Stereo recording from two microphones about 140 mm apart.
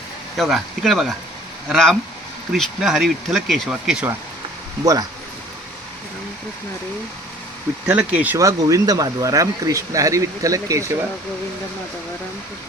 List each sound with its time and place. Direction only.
0.3 s speech: centre (ahead or behind)
7.9 s speech: 10° right (ahead or behind)
8.4 s speech: 25° right (ahead or behind)